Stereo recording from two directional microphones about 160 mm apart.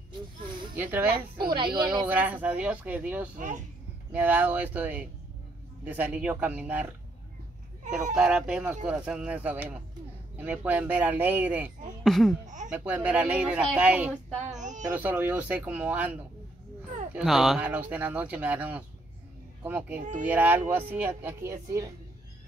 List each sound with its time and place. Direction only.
0.7 s speech: 10° right (ahead or behind)
1.5 s speech: 30° right (ahead or behind)
2.0 s speech: 10° right (ahead or behind)
3.3 s speech: 50° right (ahead or behind)
4.1 s speech: 10° right (ahead or behind)
8.1 s speech: 5° right (ahead or behind)
12.0 s speech: centre (ahead or behind)
12.7 s speech: 10° right (ahead or behind)
14.5 s a sound: 50° right (ahead or behind)
15.0 s speech: 10° right (ahead or behind)